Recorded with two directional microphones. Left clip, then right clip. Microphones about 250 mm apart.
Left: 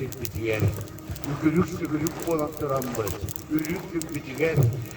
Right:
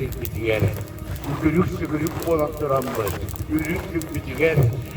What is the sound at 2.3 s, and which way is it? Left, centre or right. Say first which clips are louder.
Speech: right 6 dB; centre.